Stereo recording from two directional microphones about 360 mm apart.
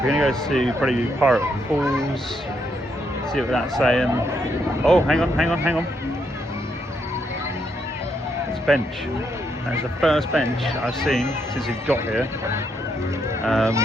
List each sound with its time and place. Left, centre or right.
0.1 s speech: centre
3.3 s speech: centre
8.7 s speech: centre